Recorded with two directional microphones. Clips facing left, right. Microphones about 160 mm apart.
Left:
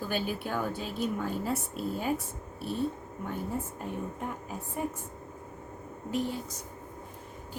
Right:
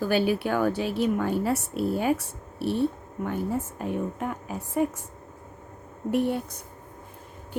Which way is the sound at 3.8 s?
90° right.